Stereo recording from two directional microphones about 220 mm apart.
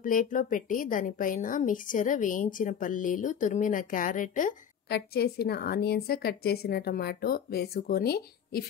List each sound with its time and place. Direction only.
0.0 s a woman's voice: 40° left (ahead or behind)